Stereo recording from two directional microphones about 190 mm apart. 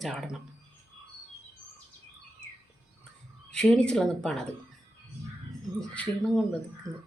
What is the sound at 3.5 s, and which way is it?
Speech, 5° left (ahead or behind).